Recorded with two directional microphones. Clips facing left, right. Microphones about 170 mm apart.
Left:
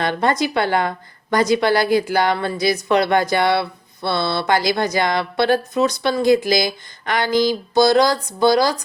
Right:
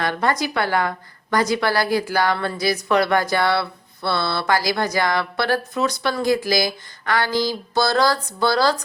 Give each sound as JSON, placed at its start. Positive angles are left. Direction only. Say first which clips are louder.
{"t": 0.0, "sound": "a woman's voice", "louder": "left 3 dB", "side_deg": 25}